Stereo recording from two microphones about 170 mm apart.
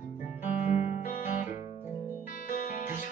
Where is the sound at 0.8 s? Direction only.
50° left (ahead or behind).